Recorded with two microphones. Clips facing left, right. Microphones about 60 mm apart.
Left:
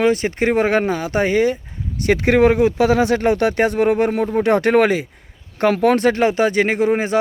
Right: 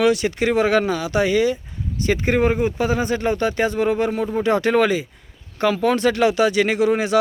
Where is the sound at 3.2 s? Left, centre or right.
Left.